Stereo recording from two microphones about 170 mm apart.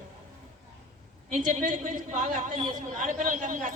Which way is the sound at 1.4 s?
50° right (ahead or behind).